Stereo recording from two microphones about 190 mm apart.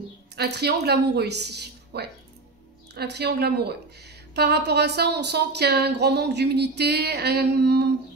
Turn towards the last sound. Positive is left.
turn(degrees=-60)  # may be behind; listen again after turning